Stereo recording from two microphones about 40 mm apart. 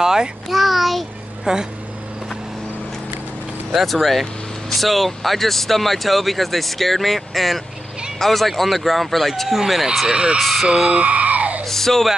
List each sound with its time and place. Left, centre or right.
0.0 s babbling: centre
0.5 s a sound: centre
3.7 s speech: centre
10.0 s speech: right
10.4 s speech: centre
10.7 s speech: right
11.6 s speech: centre